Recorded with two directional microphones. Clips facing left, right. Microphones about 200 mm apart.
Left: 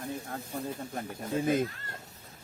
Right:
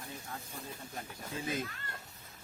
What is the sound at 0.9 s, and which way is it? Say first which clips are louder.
Speech: left 9 dB; 55° left (ahead or behind).